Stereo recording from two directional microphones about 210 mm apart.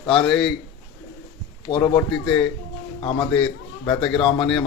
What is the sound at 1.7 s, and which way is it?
Speech, 15° left (ahead or behind).